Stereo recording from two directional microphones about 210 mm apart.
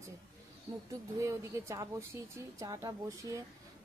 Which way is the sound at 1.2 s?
15° right (ahead or behind).